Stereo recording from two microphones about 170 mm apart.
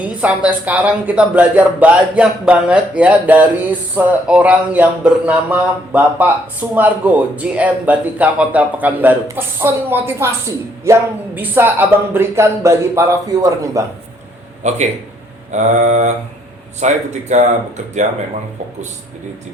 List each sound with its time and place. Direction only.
0.0 s speech: 10° right (ahead or behind)
14.6 s speech: 40° right (ahead or behind)
15.5 s mantra: 45° right (ahead or behind)